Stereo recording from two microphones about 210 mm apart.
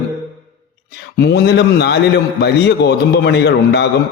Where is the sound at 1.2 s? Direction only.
50° left (ahead or behind).